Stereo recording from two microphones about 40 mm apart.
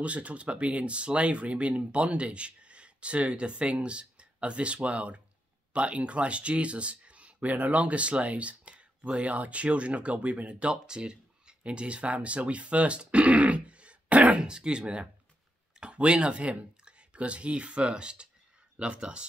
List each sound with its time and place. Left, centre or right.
0.0 s speech: right
14.4 s speech: right